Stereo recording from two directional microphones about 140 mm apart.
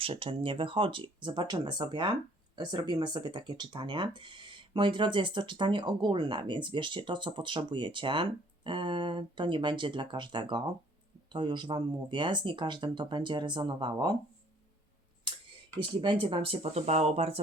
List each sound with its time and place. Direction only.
0.0 s speech: 40° right (ahead or behind)
15.8 s speech: 35° right (ahead or behind)